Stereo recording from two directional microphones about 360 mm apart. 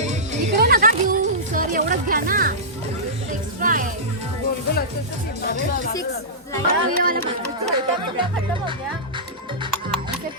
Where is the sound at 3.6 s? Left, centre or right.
Right.